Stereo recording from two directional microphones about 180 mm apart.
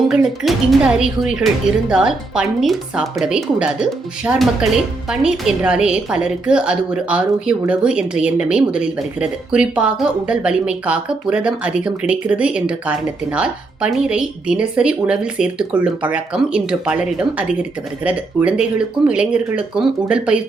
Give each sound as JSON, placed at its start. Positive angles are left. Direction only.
{"t": 0.1, "sound": "speech", "side_deg": 0}